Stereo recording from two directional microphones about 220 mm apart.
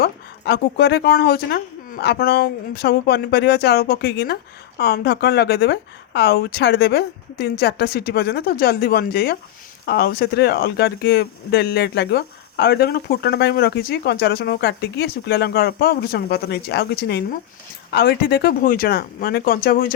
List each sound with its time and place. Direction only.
0.0 s speech: 45° left (ahead or behind)